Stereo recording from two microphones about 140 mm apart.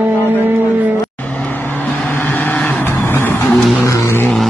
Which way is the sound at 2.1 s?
15° left (ahead or behind).